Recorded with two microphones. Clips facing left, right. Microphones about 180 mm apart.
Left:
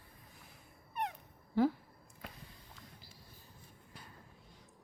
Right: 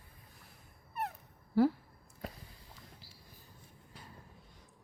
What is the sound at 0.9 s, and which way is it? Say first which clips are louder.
Cat: even; 5° right (ahead or behind).